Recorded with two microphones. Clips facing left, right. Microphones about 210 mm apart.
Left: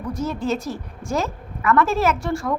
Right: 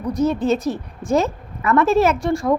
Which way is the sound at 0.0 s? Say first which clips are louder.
Right 6 dB; 15° right (ahead or behind).